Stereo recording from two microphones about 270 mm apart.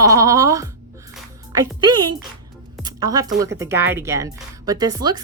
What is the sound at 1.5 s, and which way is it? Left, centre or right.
Speech, centre.